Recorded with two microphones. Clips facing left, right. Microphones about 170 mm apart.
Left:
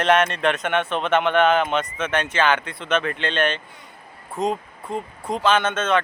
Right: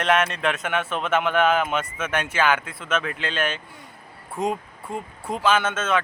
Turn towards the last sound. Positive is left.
turn(degrees=-5)  # may be behind; listen again after turning